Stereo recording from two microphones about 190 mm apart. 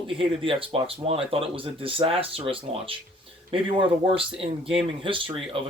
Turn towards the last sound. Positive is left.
turn(degrees=-25)  # may be behind; listen again after turning